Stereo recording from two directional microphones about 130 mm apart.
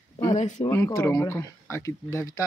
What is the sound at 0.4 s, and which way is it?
Speech, 65° left (ahead or behind).